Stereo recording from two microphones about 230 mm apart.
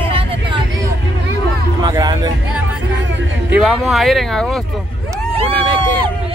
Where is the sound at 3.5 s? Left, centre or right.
Centre.